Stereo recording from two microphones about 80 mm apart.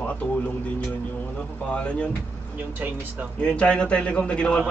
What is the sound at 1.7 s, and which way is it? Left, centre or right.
Speech, centre.